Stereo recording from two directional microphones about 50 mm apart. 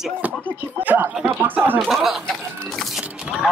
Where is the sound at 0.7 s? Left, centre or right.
Right.